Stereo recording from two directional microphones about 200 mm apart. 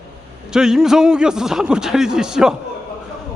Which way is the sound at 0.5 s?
5° right (ahead or behind).